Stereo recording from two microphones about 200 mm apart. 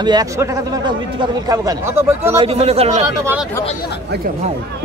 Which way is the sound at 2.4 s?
30° right (ahead or behind).